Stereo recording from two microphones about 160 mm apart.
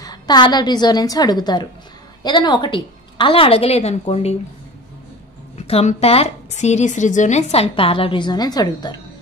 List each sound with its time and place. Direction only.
0.0 s a woman's voice: 25° left (ahead or behind); by 4.4 s 40° left (ahead or behind)
5.6 s speech: 40° left (ahead or behind); by 9.0 s 25° left (ahead or behind)